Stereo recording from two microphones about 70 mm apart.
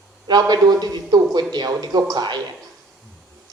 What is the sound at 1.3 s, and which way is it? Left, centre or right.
A man's voice, right.